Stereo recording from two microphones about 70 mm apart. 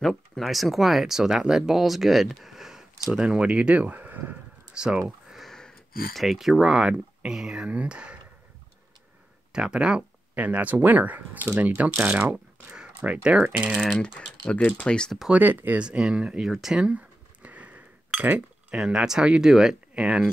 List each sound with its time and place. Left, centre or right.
0.0 s speech: centre; by 4.4 s right
4.7 s speech: centre
5.4 s a sound: centre
6.2 s speech: centre
9.5 s speech: centre
13.9 s speech: centre
15.3 s speech: right
15.8 s speech: centre
16.9 s cutlery: right
18.8 s speech: centre